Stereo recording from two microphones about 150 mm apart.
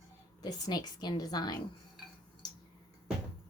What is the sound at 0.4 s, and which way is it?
Speech, 25° left (ahead or behind).